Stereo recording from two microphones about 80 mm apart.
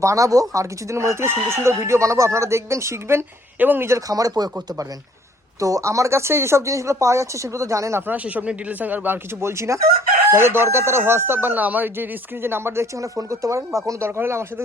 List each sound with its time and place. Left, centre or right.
0.0 s speech: right
4.1 s speech: right
5.5 s speech: right
8.0 s speech: centre
9.4 s speech: right